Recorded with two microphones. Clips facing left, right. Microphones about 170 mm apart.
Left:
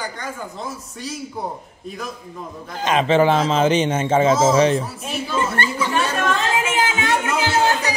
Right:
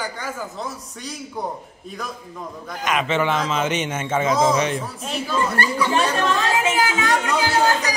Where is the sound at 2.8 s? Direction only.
30° left (ahead or behind).